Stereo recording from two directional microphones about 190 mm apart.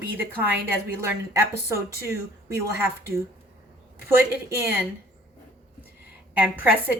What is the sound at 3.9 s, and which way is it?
Speech, 10° right (ahead or behind).